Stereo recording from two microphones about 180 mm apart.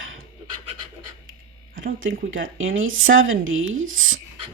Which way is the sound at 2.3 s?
90° right.